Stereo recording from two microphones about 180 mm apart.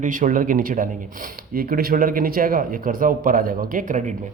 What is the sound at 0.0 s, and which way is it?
A man's voice, 45° right (ahead or behind).